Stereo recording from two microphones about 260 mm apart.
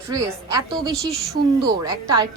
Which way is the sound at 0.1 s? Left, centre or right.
Centre.